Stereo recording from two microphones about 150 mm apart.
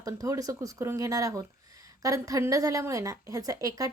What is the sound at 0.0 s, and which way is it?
A woman's voice, 20° right (ahead or behind).